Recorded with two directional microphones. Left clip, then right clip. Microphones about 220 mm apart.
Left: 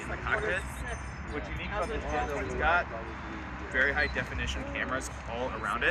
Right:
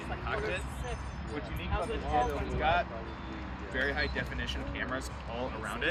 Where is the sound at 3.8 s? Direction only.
15° right (ahead or behind).